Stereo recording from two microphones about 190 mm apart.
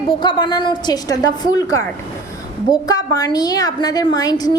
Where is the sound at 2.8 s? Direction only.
20° left (ahead or behind).